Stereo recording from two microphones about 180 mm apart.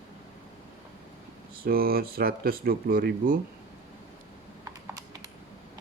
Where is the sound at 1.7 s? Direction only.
55° right (ahead or behind).